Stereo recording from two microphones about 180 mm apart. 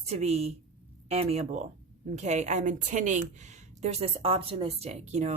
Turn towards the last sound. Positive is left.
turn(degrees=-35)  # may be behind; listen again after turning